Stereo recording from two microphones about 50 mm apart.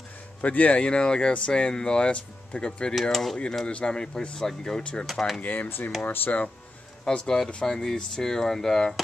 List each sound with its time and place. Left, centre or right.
0.4 s speech: left
3.0 s speech: centre
3.6 s speech: centre
5.0 s speech: centre
5.4 s speech: left
7.1 s speech: centre